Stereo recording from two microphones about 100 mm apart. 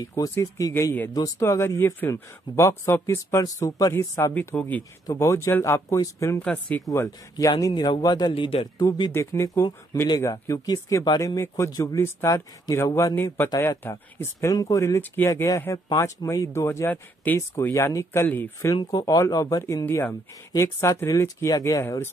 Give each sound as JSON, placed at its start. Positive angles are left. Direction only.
{"t": 0.4, "sound": "a man's voice", "side_deg": 35}
{"t": 3.6, "sound": "a man's voice", "side_deg": 40}
{"t": 4.1, "sound": "speech", "side_deg": 20}
{"t": 5.0, "sound": "a man's voice", "side_deg": 30}
{"t": 6.4, "sound": "speech", "side_deg": 15}
{"t": 6.9, "sound": "a man's voice", "side_deg": 35}
{"t": 8.3, "sound": "speech", "side_deg": 70}
{"t": 8.7, "sound": "speech", "side_deg": 45}
{"t": 9.1, "sound": "a man's voice", "side_deg": 30}
{"t": 15.0, "sound": "speech", "side_deg": 20}
{"t": 15.4, "sound": "a man's voice", "side_deg": 30}
{"t": 17.4, "sound": "speech", "side_deg": 30}
{"t": 18.8, "sound": "a man's voice", "side_deg": 40}